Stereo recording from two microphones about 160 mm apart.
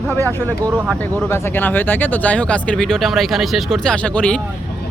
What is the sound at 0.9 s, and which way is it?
Speech, 15° left (ahead or behind).